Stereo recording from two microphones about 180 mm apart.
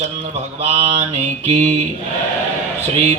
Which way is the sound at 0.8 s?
35° right (ahead or behind).